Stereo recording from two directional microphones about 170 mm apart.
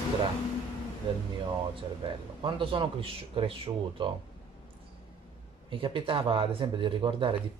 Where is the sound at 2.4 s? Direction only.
30° right (ahead or behind).